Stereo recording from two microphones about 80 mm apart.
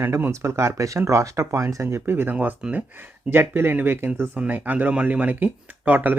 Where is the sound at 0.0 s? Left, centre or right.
Right; by 2.8 s centre.